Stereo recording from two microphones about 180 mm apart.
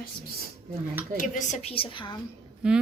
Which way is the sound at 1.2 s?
40° left (ahead or behind).